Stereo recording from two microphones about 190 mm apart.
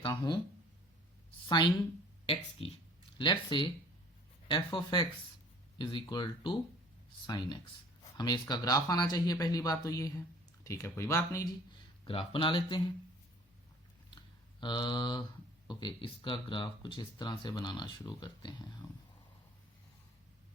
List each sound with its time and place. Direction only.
0.0 s a sound: 20° left (ahead or behind)
1.5 s a woman's voice: 25° left (ahead or behind)
12.0 s speech: 30° left (ahead or behind)
14.2 s computer keyboard: 25° left (ahead or behind)
15.6 s speech: 25° left (ahead or behind)